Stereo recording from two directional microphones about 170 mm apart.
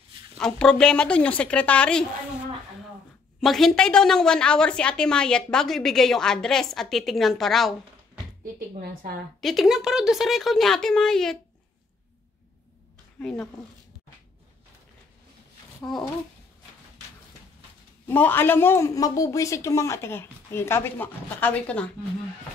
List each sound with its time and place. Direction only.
0.4 s a man's voice: 5° left (ahead or behind)
3.3 s a woman's voice: centre (ahead or behind)
8.7 s a woman's voice: 60° right (ahead or behind)
9.4 s a woman's voice: centre (ahead or behind)
13.2 s a woman's voice: 5° left (ahead or behind)
15.8 s a woman's voice: 5° left (ahead or behind)
18.0 s a man's voice: 10° left (ahead or behind)